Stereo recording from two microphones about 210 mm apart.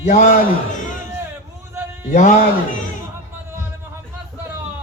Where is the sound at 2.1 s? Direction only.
35° left (ahead or behind).